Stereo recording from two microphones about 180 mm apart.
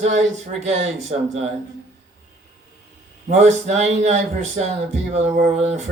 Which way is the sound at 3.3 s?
35° right (ahead or behind).